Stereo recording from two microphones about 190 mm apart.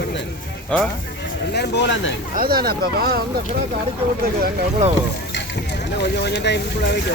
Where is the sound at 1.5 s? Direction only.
60° left (ahead or behind).